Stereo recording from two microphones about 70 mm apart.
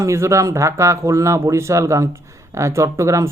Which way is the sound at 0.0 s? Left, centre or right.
Right.